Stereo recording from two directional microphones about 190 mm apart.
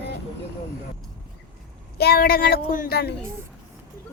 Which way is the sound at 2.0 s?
55° left (ahead or behind).